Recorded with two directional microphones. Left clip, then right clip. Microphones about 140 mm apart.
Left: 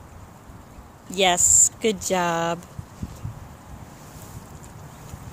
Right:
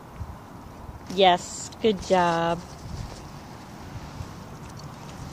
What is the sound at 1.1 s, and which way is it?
Speech, 35° left (ahead or behind).